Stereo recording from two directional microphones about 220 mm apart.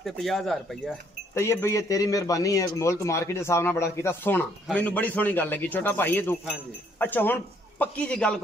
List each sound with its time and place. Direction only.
0.0 s speech: centre (ahead or behind)
1.3 s speech: 10° left (ahead or behind)